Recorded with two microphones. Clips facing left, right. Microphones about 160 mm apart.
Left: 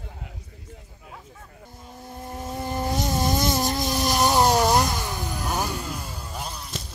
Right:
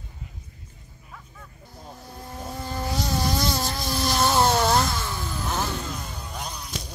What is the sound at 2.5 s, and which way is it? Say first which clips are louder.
Vehicle: left 3 dB; 20° left (ahead or behind).